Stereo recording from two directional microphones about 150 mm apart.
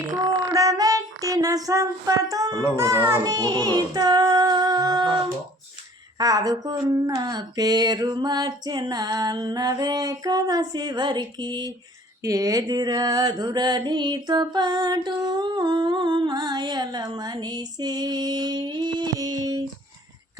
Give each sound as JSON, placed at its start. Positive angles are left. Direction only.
{"t": 0.5, "sound": "music", "side_deg": -25}
{"t": 2.7, "sound": "child singing", "side_deg": -20}
{"t": 6.1, "sound": "a sound", "side_deg": -25}